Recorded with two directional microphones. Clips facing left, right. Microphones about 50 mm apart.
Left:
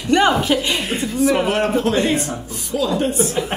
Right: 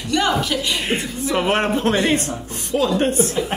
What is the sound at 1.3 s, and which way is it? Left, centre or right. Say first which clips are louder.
A man's voice: right 4 dB; right.